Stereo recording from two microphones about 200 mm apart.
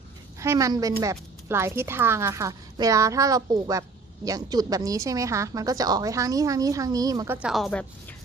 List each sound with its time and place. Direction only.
0.3 s a woman's voice: 15° right (ahead or behind)
7.3 s a woman's voice: centre (ahead or behind)